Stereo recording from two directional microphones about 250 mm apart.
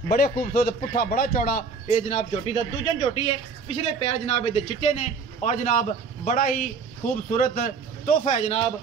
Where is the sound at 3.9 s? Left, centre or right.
Left.